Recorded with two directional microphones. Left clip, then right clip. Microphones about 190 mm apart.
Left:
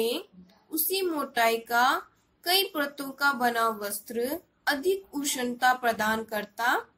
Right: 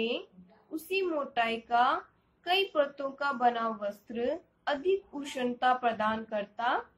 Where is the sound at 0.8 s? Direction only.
20° left (ahead or behind).